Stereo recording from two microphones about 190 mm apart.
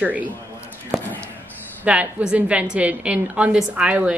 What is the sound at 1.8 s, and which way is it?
A woman's voice, 5° right (ahead or behind).